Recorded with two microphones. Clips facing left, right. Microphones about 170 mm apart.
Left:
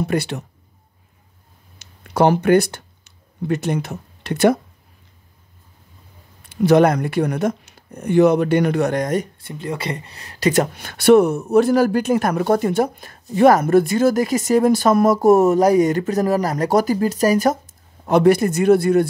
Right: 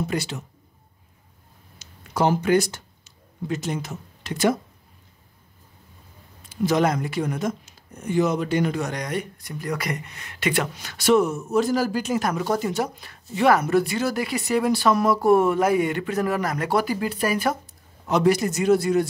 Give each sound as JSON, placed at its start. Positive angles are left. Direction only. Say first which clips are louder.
{"t": 0.0, "sound": "speech", "louder": "left 6 dB", "side_deg": 60}
{"t": 1.8, "sound": "a sound", "louder": "left 6 dB", "side_deg": 65}
{"t": 6.4, "sound": "speech", "louder": "left 7 dB", "side_deg": 60}
{"t": 9.4, "sound": "speech", "louder": "left 2 dB", "side_deg": 25}